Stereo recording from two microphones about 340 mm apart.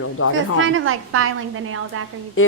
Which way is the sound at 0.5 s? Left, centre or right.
Right.